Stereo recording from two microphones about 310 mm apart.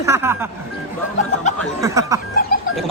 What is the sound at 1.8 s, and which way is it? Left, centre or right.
Speech, centre.